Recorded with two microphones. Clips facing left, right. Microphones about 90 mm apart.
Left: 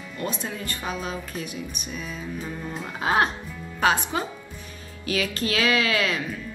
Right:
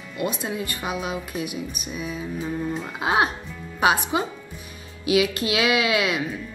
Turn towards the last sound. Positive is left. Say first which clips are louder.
# right 2 dB
turn(degrees=-15)  # may be behind; listen again after turning